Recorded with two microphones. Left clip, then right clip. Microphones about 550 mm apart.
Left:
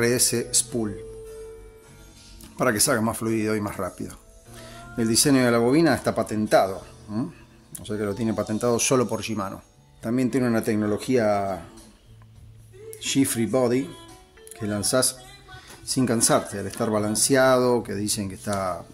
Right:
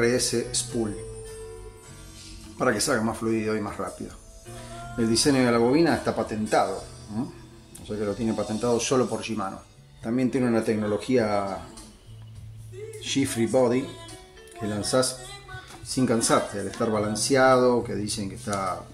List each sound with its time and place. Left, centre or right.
0.0 s speech: left
2.5 s speech: left
4.9 s speech: left
13.0 s speech: left